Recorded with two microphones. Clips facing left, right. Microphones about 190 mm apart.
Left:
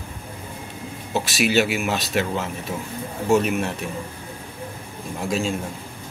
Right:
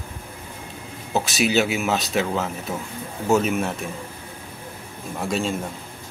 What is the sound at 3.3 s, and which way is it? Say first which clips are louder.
Speech: left 1 dB; centre (ahead or behind).